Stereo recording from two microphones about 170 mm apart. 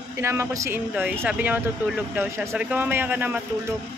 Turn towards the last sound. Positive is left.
turn(degrees=-10)  # may be behind; listen again after turning